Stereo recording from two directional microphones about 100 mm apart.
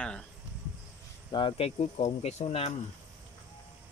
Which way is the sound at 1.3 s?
65° left (ahead or behind).